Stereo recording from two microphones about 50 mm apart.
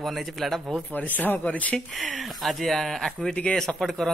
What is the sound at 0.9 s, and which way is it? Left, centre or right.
Speech, left.